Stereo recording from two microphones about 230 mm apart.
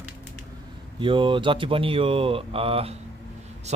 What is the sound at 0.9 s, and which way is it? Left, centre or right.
Speech, right.